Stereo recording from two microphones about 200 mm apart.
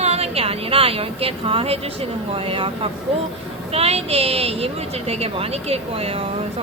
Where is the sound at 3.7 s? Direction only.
30° right (ahead or behind).